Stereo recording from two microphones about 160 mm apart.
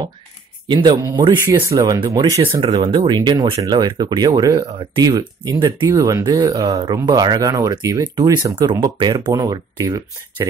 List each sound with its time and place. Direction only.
0.7 s speech: 30° right (ahead or behind)
2.4 s speech: 35° right (ahead or behind)